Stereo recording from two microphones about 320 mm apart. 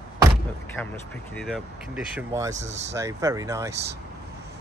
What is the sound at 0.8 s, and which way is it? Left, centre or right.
Speech, centre.